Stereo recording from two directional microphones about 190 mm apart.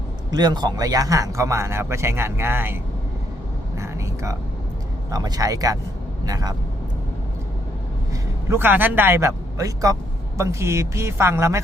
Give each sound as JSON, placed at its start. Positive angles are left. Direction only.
{"t": 0.3, "sound": "speech", "side_deg": -20}
{"t": 3.8, "sound": "a sound", "side_deg": -15}
{"t": 5.1, "sound": "speech", "side_deg": -20}
{"t": 8.4, "sound": "speech", "side_deg": -10}